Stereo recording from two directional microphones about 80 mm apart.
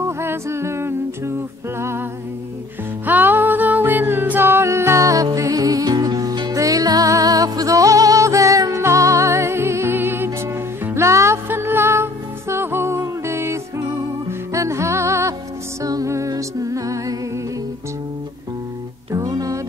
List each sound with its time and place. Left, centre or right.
0.0 s music: right
1.8 s humming: right
3.1 s music: right
19.1 s music: right